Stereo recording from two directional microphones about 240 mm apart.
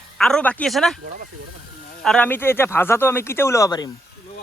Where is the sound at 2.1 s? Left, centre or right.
Centre.